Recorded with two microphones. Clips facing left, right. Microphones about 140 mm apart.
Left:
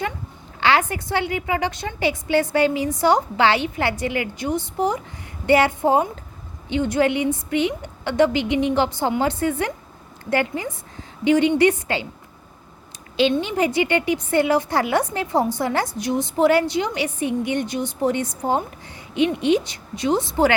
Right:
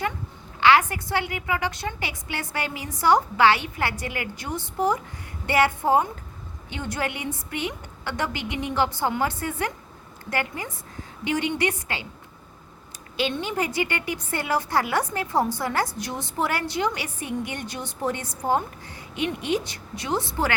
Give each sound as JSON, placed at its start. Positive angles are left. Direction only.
{"t": 0.6, "sound": "a woman's voice", "side_deg": 25}
{"t": 13.1, "sound": "a woman's voice", "side_deg": 25}